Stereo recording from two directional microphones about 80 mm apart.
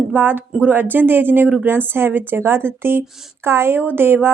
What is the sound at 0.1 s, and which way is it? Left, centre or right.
Speech, right.